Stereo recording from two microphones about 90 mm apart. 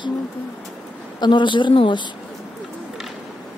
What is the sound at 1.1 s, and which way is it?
Speech, 55° left (ahead or behind).